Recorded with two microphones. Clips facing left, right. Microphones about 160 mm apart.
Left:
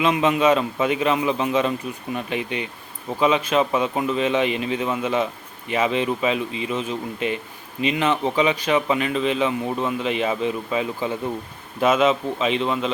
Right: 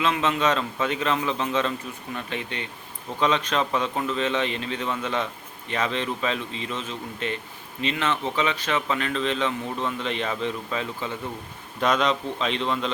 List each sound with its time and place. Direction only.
0.0 s a man's voice: 15° left (ahead or behind)